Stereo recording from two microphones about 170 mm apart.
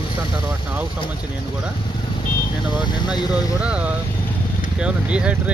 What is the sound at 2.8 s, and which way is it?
Speech, 25° left (ahead or behind).